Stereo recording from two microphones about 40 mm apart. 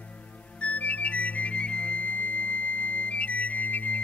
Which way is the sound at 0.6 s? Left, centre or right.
Left.